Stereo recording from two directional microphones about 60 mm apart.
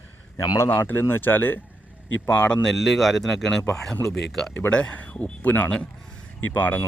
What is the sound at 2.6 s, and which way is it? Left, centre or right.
Speech, centre.